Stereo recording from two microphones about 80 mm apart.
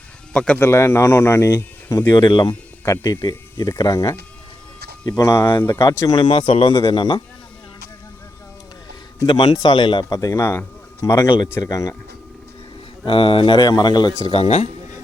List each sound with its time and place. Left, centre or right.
0.3 s speech: centre
0.6 s speech: left
1.5 s speech: left
2.1 s speech: left
2.8 s speech: left
5.6 s speech: left
6.1 s speech: left
6.8 s speech: left
9.2 s speech: left
10.1 s speech: left
11.0 s speech: left
13.1 s speech: left